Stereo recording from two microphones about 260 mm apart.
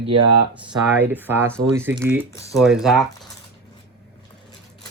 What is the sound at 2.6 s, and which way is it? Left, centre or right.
Speech, centre.